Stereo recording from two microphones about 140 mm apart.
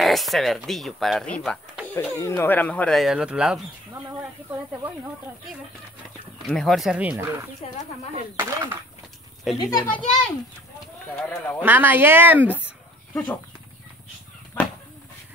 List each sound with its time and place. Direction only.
0.0 s speech: centre (ahead or behind)
6.4 s speech: centre (ahead or behind)
7.6 s speech: 50° left (ahead or behind)
8.4 s speech: 15° right (ahead or behind)
9.5 s speech: centre (ahead or behind)
9.8 s speech: 10° left (ahead or behind)
11.6 s speech: 15° right (ahead or behind)
13.1 s speech: 10° left (ahead or behind)